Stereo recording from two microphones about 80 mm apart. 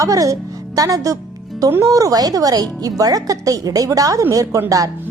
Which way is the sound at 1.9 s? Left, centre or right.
Right.